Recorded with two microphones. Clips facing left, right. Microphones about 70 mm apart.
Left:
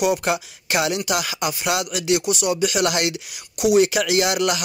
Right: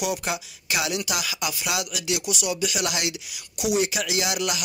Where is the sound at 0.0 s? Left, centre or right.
Left.